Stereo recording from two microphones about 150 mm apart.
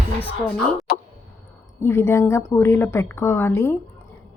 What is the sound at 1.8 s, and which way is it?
Speech, 15° left (ahead or behind).